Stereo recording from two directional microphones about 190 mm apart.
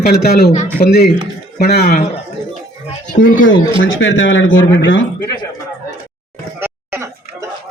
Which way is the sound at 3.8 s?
90° left.